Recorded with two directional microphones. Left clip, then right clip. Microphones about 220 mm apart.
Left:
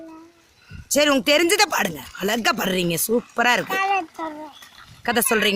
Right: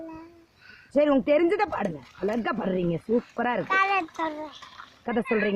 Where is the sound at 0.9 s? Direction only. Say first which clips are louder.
Left 4 dB; 10° left (ahead or behind).